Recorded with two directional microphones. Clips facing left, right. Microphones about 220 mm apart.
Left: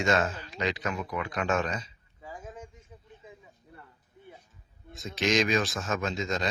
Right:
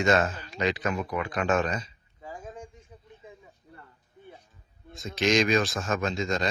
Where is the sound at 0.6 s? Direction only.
55° right (ahead or behind).